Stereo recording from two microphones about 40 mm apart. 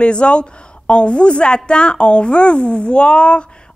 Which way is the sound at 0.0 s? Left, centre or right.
Left.